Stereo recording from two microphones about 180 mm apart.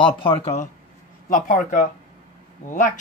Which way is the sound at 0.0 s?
30° left (ahead or behind).